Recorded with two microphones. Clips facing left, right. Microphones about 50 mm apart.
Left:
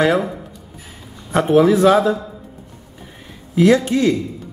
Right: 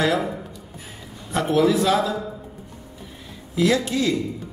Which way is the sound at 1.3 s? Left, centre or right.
Left.